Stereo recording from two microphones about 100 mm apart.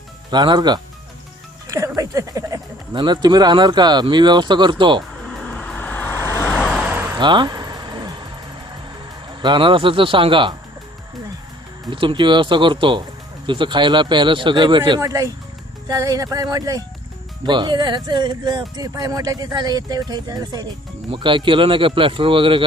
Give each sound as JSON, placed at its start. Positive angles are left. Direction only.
{"t": 0.3, "sound": "speech", "side_deg": -45}
{"t": 1.6, "sound": "a sound", "side_deg": -35}
{"t": 2.9, "sound": "speech", "side_deg": -50}
{"t": 5.2, "sound": "vehicle", "side_deg": 10}
{"t": 6.5, "sound": "vehicle", "side_deg": -5}
{"t": 6.9, "sound": "vehicle", "side_deg": -20}
{"t": 7.2, "sound": "vehicle", "side_deg": -50}
{"t": 9.4, "sound": "speech", "side_deg": -55}
{"t": 11.9, "sound": "speech", "side_deg": -55}
{"t": 15.0, "sound": "speech", "side_deg": -35}
{"t": 17.4, "sound": "speech", "side_deg": -50}
{"t": 18.8, "sound": "speech", "side_deg": -35}
{"t": 21.1, "sound": "speech", "side_deg": -55}